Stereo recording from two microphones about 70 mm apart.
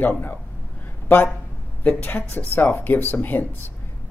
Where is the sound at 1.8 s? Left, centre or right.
Left.